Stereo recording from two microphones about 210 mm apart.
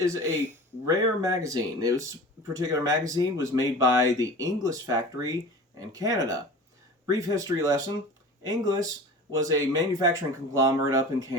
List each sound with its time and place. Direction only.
0.0 s speech: 15° right (ahead or behind)